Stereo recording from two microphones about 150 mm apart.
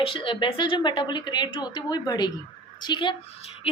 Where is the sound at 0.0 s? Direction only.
35° left (ahead or behind).